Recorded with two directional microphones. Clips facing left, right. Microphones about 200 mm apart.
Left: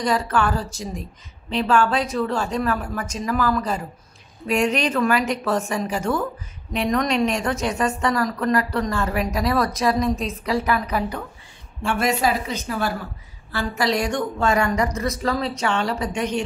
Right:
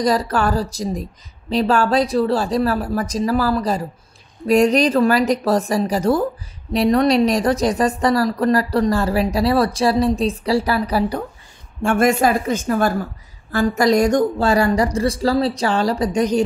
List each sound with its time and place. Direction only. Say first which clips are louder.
0.0 s a woman's voice: right 3 dB; 35° right (ahead or behind)
11.8 s a woman's voice: right 6 dB; 50° right (ahead or behind)